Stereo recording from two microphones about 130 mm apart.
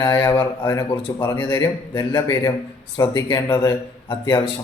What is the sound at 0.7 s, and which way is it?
Speech, 25° left (ahead or behind).